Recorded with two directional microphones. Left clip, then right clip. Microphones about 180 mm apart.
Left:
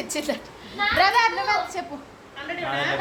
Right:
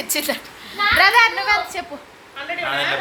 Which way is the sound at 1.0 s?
30° right (ahead or behind).